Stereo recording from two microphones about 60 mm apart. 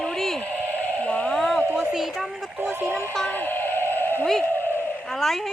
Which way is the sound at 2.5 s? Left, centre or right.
Right.